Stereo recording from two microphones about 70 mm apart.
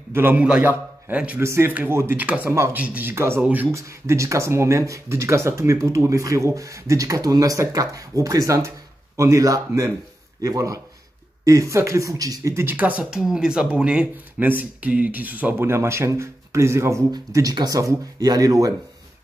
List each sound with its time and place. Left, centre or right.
0.1 s a man's voice: right
0.4 s a man's voice: centre
1.4 s speech: right
2.1 s speech: right
3.1 s speech: right
3.3 s speech: right
3.7 s speech: right
12.7 s speech: right
13.1 s speech: centre
15.5 s speech: right
17.3 s speech: right